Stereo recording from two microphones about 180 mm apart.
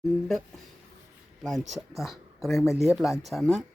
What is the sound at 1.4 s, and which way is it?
Speech, centre (ahead or behind).